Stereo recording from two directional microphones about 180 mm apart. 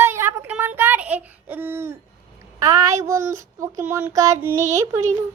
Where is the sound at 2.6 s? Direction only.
20° right (ahead or behind).